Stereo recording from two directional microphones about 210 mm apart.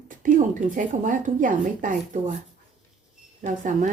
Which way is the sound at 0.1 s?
40° right (ahead or behind).